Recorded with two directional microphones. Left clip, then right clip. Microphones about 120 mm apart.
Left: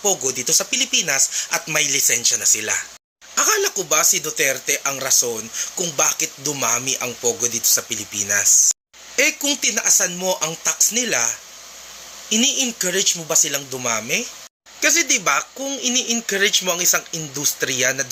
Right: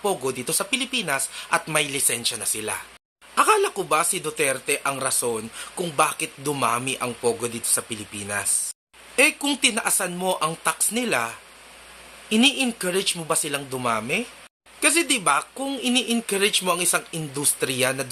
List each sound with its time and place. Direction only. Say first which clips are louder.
0.0 s speech: left 3 dB; 10° right (ahead or behind)
3.3 s speech: even; 15° right (ahead or behind)